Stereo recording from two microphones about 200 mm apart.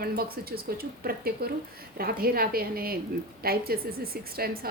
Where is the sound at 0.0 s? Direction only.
50° right (ahead or behind).